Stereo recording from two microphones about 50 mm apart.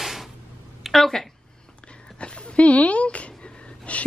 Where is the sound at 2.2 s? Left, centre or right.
Left.